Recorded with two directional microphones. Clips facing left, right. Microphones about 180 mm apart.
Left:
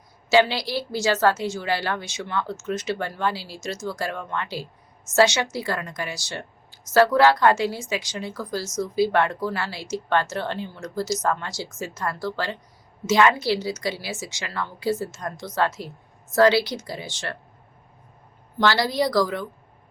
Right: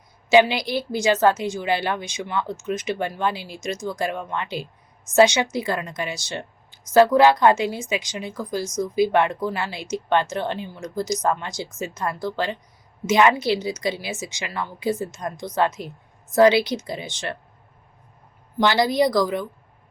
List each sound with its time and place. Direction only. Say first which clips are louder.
0.3 s a woman's voice: right 3 dB; 15° right (ahead or behind)
18.6 s speech: right 3 dB; 20° right (ahead or behind)